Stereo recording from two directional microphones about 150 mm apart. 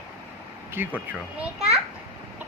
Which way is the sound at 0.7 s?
10° right (ahead or behind).